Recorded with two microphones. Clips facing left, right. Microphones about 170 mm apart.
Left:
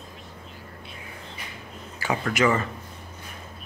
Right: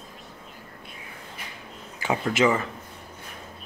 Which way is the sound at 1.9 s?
20° right (ahead or behind).